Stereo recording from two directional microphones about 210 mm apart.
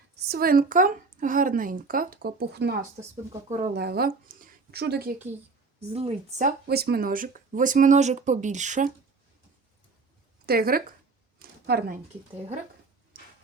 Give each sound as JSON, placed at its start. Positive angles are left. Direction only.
{"t": 0.3, "sound": "speech", "side_deg": -45}
{"t": 5.9, "sound": "speech", "side_deg": -30}
{"t": 6.7, "sound": "speech", "side_deg": -50}
{"t": 10.4, "sound": "speech", "side_deg": -45}
{"t": 11.3, "sound": "a sound", "side_deg": -45}